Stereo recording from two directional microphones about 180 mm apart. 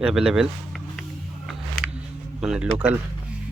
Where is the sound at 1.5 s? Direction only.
Centre (ahead or behind).